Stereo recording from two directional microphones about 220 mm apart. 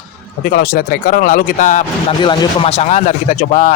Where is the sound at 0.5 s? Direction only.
45° left (ahead or behind).